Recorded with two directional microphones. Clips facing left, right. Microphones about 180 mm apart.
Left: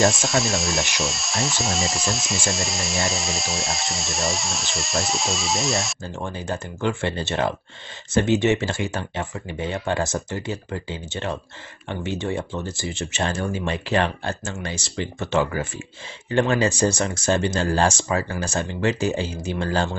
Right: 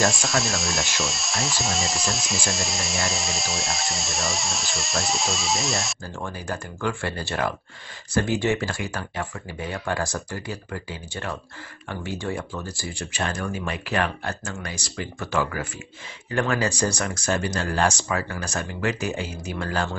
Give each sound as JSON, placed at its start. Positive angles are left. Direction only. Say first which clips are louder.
{"t": 0.0, "sound": "speech", "louder": "left 3 dB", "side_deg": 0}
{"t": 6.1, "sound": "speech", "louder": "left 3 dB", "side_deg": 20}